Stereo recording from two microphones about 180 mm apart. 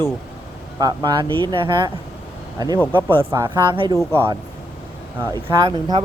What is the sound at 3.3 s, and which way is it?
Speech, 20° right (ahead or behind).